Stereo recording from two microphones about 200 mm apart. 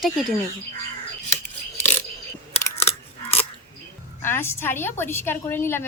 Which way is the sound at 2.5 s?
30° left (ahead or behind).